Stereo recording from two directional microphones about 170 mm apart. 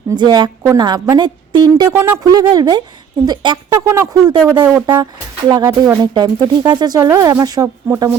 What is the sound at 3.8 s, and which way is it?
A woman's voice, 15° right (ahead or behind).